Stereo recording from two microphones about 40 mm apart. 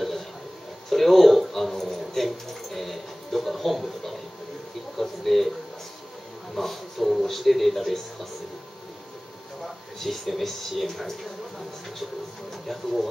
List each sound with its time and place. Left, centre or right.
0.8 s a sound: centre
4.9 s speech: centre
6.5 s speech: centre
9.9 s speech: centre
12.6 s speech: centre